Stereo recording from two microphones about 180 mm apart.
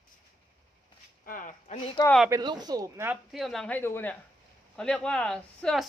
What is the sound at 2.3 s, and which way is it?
Speech, 25° right (ahead or behind).